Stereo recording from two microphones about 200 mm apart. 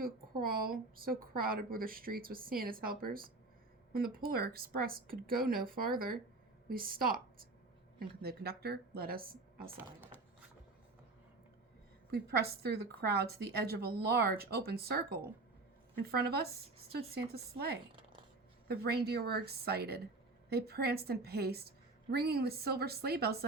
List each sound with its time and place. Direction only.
0.4 s a woman's voice: 50° right (ahead or behind)
12.1 s a woman's voice: 50° right (ahead or behind)